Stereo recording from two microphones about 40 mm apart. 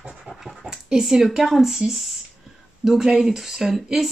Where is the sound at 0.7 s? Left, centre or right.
Centre.